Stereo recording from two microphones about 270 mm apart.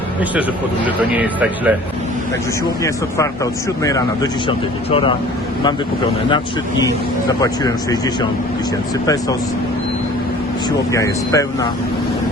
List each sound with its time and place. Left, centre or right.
0.9 s speech: centre
3.8 s speech: centre
6.3 s speech: centre
10.9 s speech: centre